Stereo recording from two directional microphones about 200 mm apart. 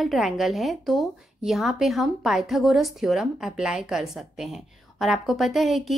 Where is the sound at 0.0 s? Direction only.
Centre (ahead or behind).